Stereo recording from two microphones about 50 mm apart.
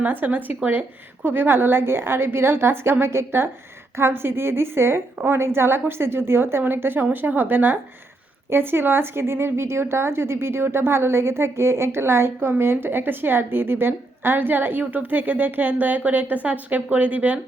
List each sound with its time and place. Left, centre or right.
0.0 s speech: right
1.2 s a woman's voice: right